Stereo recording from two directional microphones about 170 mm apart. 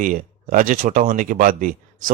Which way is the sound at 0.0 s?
55° right (ahead or behind).